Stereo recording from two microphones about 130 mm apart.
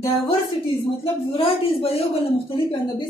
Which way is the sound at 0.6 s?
45° left (ahead or behind).